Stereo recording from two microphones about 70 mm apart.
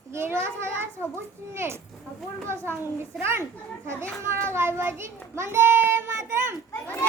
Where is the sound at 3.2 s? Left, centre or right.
Right.